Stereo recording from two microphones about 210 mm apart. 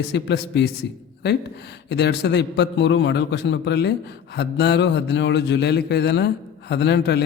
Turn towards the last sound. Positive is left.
turn(degrees=55)  # may be behind; listen again after turning